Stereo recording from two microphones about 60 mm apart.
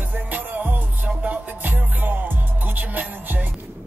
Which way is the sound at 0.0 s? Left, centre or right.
Right.